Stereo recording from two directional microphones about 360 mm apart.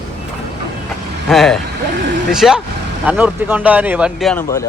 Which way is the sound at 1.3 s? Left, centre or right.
Centre.